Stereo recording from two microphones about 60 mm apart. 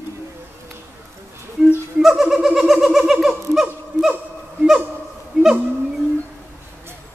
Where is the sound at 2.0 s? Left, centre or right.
Centre.